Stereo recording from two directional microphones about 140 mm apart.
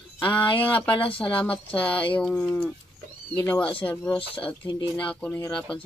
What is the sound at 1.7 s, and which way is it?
Speech, 10° left (ahead or behind).